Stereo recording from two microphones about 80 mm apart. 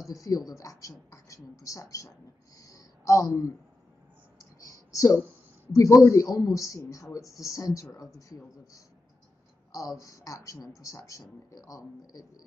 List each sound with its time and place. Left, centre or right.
0.0 s speech: left
4.6 s a sound: left
5.7 s speech: left